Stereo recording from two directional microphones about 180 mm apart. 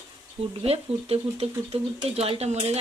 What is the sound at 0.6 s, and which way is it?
Speech, 35° right (ahead or behind).